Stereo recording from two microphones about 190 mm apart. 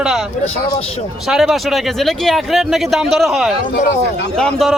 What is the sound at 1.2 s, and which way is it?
Speech, centre (ahead or behind).